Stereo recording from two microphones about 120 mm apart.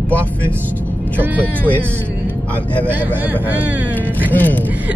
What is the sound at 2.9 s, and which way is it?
Speech, 15° right (ahead or behind).